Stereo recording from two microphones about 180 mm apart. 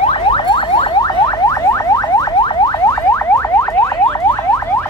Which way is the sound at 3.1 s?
15° left (ahead or behind).